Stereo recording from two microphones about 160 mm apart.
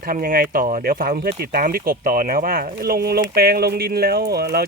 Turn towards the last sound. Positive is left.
turn(degrees=-80)